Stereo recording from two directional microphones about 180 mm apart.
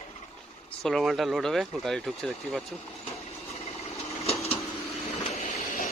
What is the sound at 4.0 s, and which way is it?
Sewing machine, 35° left (ahead or behind).